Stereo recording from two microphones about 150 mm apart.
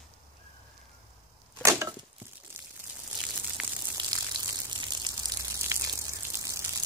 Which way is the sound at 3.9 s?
25° right (ahead or behind).